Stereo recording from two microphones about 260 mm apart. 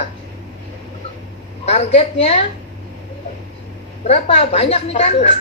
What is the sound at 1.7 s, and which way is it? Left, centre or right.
Speech, left.